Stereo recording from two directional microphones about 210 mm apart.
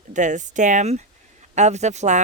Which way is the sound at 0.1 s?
35° right (ahead or behind).